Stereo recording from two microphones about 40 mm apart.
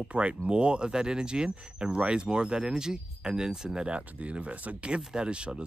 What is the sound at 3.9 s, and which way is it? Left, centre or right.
Speech, right.